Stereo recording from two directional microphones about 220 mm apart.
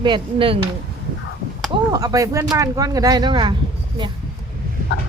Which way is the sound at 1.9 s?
15° right (ahead or behind).